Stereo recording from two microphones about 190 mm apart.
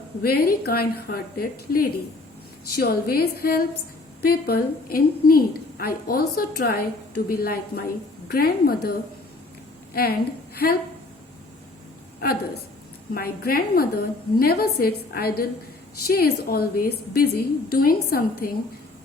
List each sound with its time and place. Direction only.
0.2 s a woman's voice: 55° left (ahead or behind)
13.1 s a woman's voice: 50° left (ahead or behind)